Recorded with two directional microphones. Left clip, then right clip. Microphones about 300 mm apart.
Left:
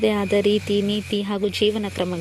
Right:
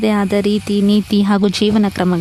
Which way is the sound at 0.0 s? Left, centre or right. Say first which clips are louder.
Right 3 dB; right.